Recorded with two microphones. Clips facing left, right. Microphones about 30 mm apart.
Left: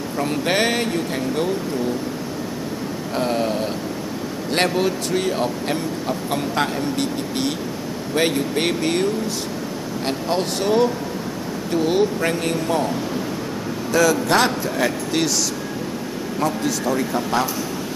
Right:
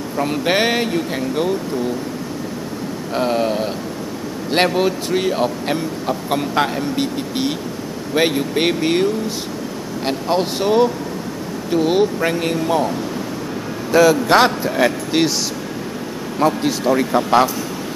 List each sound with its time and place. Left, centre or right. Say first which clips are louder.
0.2 s speech: right 3 dB; centre
3.2 s speech: right 3 dB; centre
10.0 s speech: right 4 dB; centre
13.9 s speech: right 5 dB; right
16.4 s a man's voice: right 6 dB; right